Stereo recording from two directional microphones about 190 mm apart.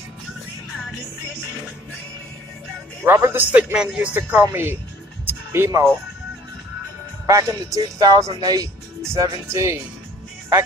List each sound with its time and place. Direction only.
3.0 s speech: 10° right (ahead or behind)
5.2 s music: 15° right (ahead or behind)
7.2 s speech: 15° right (ahead or behind)